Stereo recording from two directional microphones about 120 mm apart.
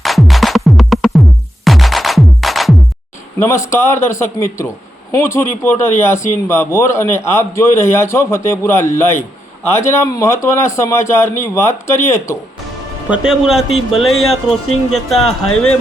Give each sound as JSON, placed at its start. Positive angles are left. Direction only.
{"t": 0.0, "sound": "music", "side_deg": 0}
{"t": 3.3, "sound": "a man's voice", "side_deg": 20}
{"t": 13.1, "sound": "speech", "side_deg": -5}